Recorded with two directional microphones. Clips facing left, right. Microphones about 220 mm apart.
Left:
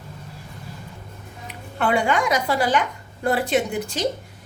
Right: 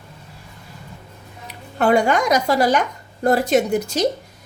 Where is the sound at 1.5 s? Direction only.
40° right (ahead or behind).